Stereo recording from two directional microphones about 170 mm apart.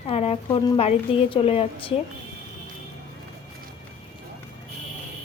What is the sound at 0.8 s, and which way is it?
A woman's voice, 35° left (ahead or behind).